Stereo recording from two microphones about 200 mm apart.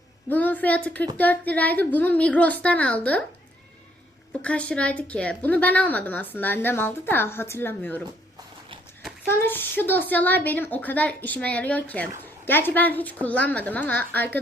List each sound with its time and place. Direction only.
0.3 s a woman's voice: 10° left (ahead or behind)
4.4 s a woman's voice: 5° left (ahead or behind)
9.5 s a woman's voice: 10° left (ahead or behind)